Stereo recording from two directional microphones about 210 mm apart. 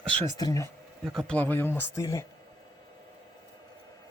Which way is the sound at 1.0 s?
5° left (ahead or behind).